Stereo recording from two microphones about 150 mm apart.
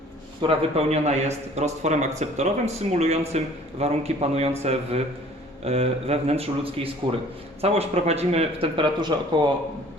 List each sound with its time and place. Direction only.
0.4 s speech: 45° right (ahead or behind)